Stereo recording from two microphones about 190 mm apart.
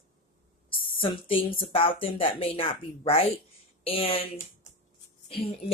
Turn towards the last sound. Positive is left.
turn(degrees=30)  # may be behind; listen again after turning